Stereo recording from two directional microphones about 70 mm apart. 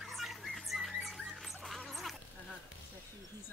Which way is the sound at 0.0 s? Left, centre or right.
Centre.